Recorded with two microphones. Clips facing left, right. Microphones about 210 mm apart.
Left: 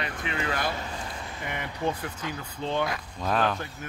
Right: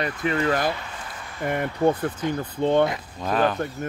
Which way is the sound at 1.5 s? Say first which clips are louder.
Right 9 dB; 50° right (ahead or behind).